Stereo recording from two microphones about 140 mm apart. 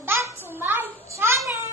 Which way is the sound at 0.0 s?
15° right (ahead or behind).